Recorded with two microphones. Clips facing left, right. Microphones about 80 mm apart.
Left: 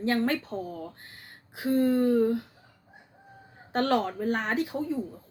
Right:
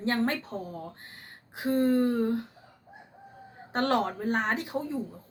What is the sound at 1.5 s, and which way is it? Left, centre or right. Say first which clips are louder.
Speech: left 1 dB; right.